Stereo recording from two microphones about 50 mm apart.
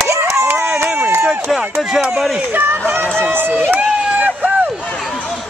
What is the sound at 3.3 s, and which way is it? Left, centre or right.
Speech, right.